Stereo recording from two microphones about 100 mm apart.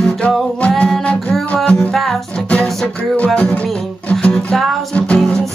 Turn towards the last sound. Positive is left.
turn(degrees=10)  # may be behind; listen again after turning